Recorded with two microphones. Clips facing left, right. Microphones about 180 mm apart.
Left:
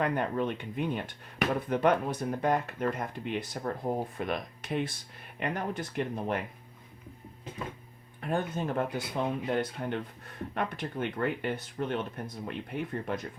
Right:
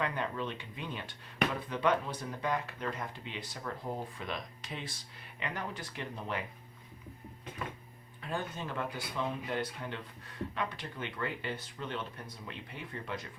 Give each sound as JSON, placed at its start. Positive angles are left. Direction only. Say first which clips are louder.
{"t": 0.0, "sound": "speech", "louder": "left 6 dB", "side_deg": 50}
{"t": 8.2, "sound": "speech", "louder": "left 7 dB", "side_deg": 45}